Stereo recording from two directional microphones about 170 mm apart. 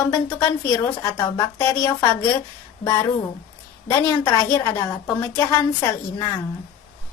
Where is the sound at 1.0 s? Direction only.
20° left (ahead or behind).